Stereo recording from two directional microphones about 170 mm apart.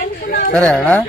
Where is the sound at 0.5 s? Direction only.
10° left (ahead or behind).